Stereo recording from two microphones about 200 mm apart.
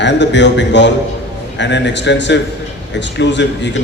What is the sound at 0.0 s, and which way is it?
A man's voice, 60° left (ahead or behind).